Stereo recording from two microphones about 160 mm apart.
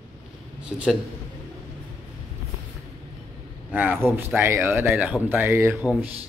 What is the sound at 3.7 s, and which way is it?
Speech, 10° right (ahead or behind).